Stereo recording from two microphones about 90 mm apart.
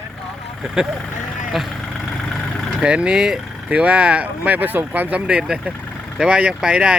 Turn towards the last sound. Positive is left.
turn(degrees=-10)  # may be behind; listen again after turning